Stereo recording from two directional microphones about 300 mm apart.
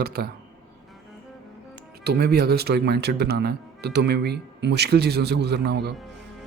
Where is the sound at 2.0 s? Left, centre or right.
Right.